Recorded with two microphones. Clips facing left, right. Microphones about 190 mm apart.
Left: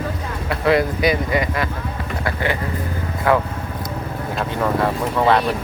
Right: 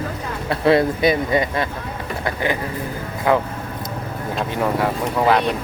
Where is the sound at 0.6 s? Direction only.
25° right (ahead or behind).